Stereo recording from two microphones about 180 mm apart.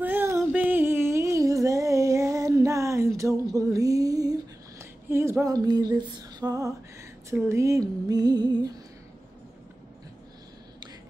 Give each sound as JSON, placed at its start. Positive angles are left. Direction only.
{"t": 0.0, "sound": "music", "side_deg": -10}
{"t": 3.5, "sound": "speech", "side_deg": -20}